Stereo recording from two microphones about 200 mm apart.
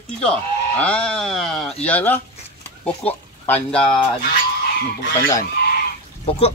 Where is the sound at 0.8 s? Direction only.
5° left (ahead or behind).